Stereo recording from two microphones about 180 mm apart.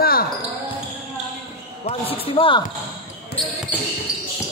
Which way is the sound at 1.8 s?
30° left (ahead or behind).